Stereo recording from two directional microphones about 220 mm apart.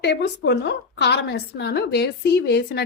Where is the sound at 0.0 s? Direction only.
50° left (ahead or behind).